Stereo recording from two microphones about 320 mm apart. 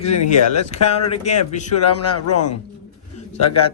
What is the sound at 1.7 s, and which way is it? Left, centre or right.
Speech, left.